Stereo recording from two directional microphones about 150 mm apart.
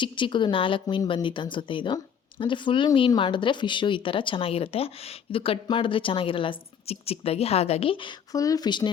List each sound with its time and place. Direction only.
0.0 s speech: 30° left (ahead or behind)
8.3 s speech: 25° left (ahead or behind)